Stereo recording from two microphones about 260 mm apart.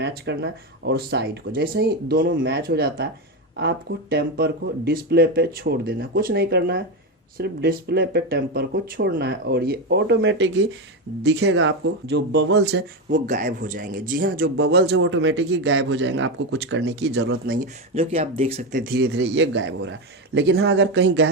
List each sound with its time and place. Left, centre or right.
0.0 s speech: right
13.1 s speech: right
18.1 s speech: right